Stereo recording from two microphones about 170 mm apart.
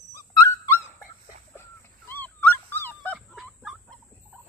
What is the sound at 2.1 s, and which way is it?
Dog, 10° left (ahead or behind).